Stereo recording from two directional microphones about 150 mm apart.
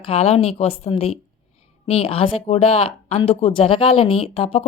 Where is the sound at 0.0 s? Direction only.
40° left (ahead or behind).